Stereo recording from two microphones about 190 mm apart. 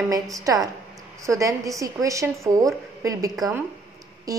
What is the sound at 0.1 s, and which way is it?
A woman's voice, 20° right (ahead or behind).